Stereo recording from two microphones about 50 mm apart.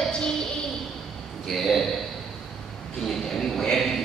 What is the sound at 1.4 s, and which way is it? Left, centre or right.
Speech, centre.